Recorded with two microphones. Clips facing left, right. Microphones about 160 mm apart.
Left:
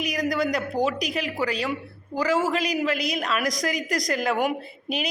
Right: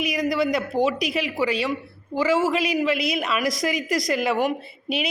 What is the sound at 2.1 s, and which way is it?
A man's voice, 5° right (ahead or behind).